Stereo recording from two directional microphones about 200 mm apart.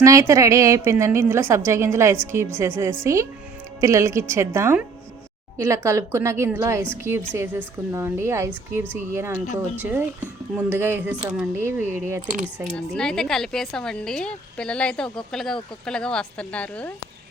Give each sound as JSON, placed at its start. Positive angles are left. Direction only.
{"t": 0.0, "sound": "a woman's voice", "side_deg": -15}
{"t": 12.7, "sound": "speech", "side_deg": 5}